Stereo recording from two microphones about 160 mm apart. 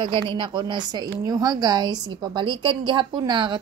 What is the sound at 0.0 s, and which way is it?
A woman's voice, 30° right (ahead or behind).